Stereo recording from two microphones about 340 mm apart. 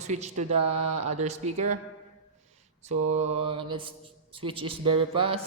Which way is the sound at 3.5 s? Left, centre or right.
Centre.